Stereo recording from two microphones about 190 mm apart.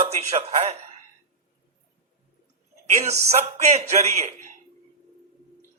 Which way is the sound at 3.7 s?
35° right (ahead or behind).